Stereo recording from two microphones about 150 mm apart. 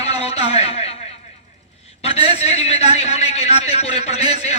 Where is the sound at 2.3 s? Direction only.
45° left (ahead or behind).